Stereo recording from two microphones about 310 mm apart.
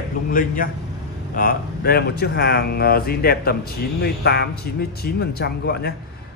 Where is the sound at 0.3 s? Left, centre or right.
Left.